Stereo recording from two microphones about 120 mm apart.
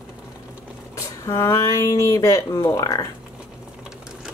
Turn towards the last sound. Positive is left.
turn(degrees=25)  # may be behind; listen again after turning